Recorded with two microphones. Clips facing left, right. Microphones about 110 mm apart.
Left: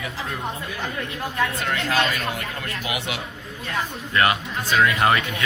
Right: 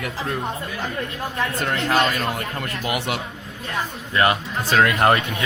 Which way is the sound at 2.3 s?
40° right (ahead or behind).